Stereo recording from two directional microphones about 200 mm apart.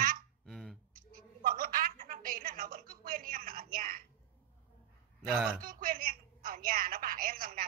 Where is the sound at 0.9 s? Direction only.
45° right (ahead or behind).